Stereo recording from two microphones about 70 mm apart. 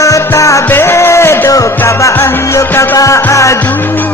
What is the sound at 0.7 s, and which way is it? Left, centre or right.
Music, left.